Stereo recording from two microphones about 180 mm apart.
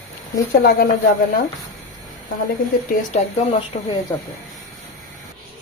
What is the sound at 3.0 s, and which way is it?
Speech, 40° left (ahead or behind).